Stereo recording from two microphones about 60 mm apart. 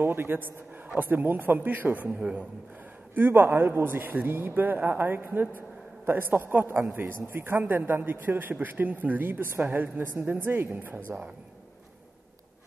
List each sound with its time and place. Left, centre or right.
0.0 s a man's voice: right
3.2 s a man's voice: right